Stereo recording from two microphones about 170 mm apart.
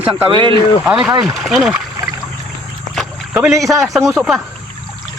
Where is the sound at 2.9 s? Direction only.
Centre (ahead or behind).